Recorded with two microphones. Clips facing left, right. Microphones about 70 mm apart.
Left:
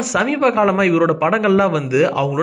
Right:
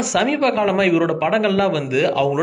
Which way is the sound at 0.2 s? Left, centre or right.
Centre.